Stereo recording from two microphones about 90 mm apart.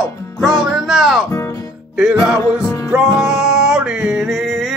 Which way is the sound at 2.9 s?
5° right (ahead or behind).